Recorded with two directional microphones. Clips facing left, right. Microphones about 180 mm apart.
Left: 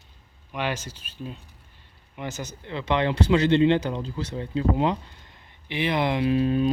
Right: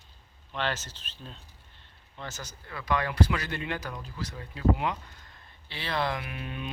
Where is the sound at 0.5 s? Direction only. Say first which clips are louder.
Left 3 dB; 10° left (ahead or behind).